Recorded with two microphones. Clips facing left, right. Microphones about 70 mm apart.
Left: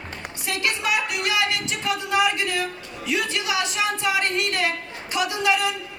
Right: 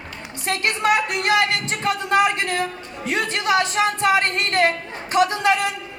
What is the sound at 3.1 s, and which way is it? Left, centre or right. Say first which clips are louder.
A woman's voice: right 4 dB; right.